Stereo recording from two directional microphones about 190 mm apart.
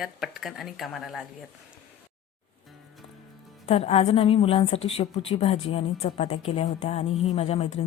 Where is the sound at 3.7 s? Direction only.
30° left (ahead or behind).